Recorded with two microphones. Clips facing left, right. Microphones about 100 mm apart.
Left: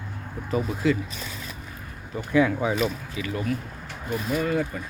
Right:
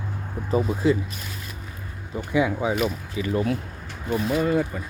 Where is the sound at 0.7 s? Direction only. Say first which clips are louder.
Right 2 dB; 25° right (ahead or behind).